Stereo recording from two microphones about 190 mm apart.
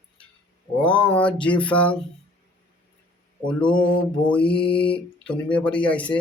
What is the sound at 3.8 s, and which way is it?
Mantra, 25° left (ahead or behind).